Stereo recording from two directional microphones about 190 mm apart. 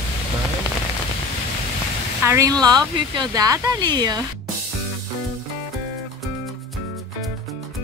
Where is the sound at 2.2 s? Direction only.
15° right (ahead or behind).